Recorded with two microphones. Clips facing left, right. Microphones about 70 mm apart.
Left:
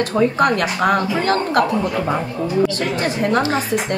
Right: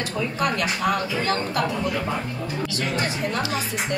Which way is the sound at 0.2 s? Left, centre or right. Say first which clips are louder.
Left 8 dB; left.